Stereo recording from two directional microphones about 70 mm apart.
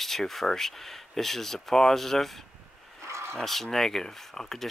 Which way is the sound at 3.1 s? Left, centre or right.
Right.